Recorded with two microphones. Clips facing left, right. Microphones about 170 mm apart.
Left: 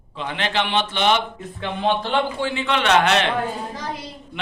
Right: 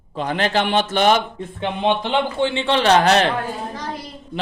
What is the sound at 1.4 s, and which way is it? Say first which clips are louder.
Speech: right 3 dB; 20° right (ahead or behind).